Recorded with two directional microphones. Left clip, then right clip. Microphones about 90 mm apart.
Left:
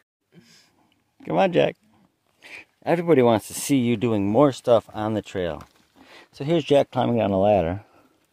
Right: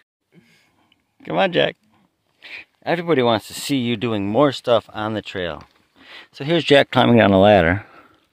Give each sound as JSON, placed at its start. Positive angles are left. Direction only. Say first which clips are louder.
{"t": 1.2, "sound": "speech", "louder": "right 2 dB", "side_deg": 20}
{"t": 2.4, "sound": "speech", "louder": "right 2 dB", "side_deg": 35}
{"t": 5.2, "sound": "a sound", "louder": "right 1 dB", "side_deg": 30}
{"t": 6.0, "sound": "a sound", "louder": "right 6 dB", "side_deg": 20}
{"t": 6.9, "sound": "speech", "louder": "right 8 dB", "side_deg": -60}
{"t": 7.4, "sound": "speech", "louder": "right 6 dB", "side_deg": -40}